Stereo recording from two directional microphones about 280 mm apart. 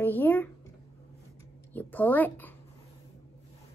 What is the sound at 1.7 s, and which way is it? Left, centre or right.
Speech, centre.